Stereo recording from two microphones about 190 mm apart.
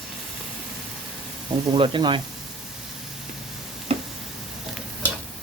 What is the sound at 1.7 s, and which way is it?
Speech, 25° right (ahead or behind).